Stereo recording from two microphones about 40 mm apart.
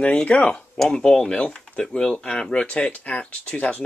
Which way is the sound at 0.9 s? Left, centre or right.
Centre.